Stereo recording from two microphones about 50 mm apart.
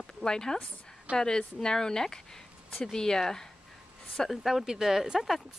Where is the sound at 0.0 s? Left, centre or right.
Centre.